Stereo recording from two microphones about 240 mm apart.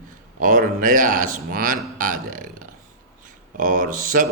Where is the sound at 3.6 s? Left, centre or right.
Right.